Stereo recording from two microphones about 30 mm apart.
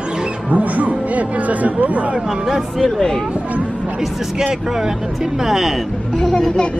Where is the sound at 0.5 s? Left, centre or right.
Right.